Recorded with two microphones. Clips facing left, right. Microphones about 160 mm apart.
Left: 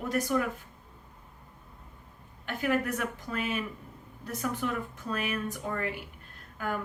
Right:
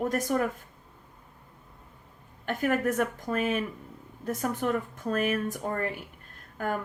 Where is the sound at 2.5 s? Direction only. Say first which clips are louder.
Right 3 dB; 50° right (ahead or behind).